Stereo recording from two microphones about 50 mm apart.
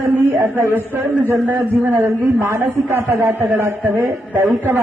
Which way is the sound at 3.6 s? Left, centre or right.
Right.